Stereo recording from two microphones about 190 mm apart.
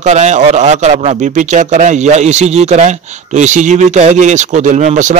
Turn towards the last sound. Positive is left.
turn(degrees=-40)  # may be behind; listen again after turning